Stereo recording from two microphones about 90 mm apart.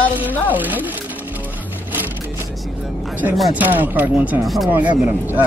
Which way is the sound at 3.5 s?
20° right (ahead or behind).